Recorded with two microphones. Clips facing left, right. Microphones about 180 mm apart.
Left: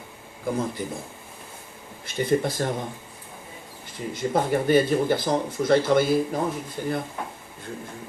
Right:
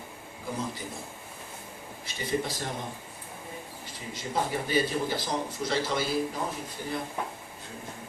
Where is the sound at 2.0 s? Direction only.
55° left (ahead or behind).